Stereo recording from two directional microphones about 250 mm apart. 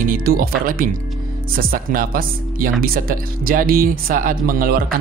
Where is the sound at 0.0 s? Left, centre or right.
Right.